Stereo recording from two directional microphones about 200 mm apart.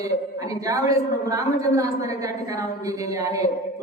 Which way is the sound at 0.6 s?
15° right (ahead or behind).